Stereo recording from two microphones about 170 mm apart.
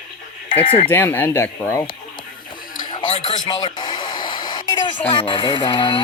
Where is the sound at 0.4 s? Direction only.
30° left (ahead or behind).